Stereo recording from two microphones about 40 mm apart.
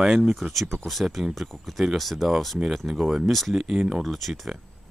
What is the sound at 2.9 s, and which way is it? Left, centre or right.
Speech, centre.